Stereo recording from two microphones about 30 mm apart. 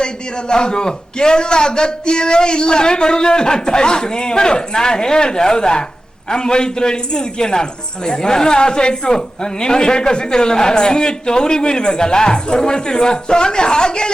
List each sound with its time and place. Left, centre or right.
0.0 s a man's voice: left